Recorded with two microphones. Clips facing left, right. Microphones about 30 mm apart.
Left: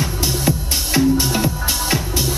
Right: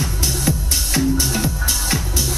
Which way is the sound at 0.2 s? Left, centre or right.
Left.